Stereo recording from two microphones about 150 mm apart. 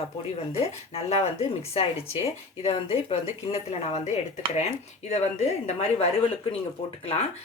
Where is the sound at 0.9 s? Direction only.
45° left (ahead or behind).